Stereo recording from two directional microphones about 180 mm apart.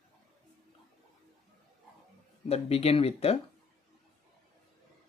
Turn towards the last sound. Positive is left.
turn(degrees=35)  # may be behind; listen again after turning